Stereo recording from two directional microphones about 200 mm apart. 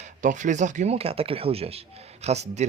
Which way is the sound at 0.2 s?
40° right (ahead or behind).